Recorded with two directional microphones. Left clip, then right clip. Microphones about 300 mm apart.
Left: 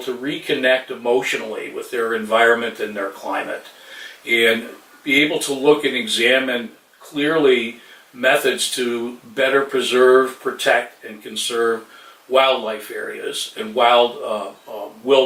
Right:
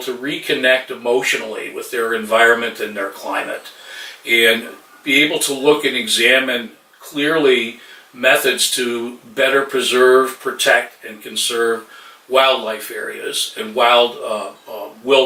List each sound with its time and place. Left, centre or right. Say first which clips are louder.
0.0 s speech: right 2 dB; centre
5.4 s speech: right 2 dB; left
5.6 s speech: right 1 dB; centre
12.3 s speech: right 2 dB; centre
14.1 s speech: right 1 dB; centre